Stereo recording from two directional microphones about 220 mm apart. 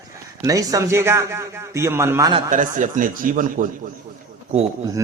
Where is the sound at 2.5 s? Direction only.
35° right (ahead or behind).